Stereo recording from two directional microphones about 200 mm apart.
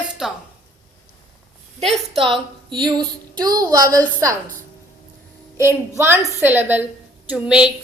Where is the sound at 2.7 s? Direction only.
25° right (ahead or behind).